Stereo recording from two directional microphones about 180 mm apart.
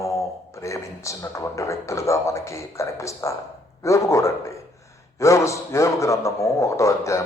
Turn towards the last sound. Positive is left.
turn(degrees=15)  # may be behind; listen again after turning